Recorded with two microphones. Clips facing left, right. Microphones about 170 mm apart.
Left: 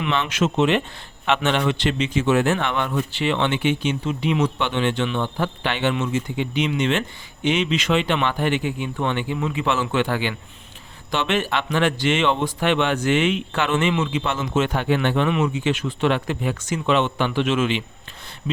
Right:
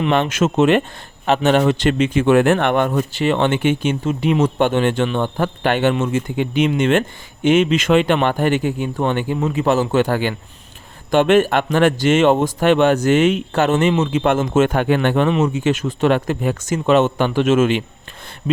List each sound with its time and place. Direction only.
0.1 s speech: 50° right (ahead or behind)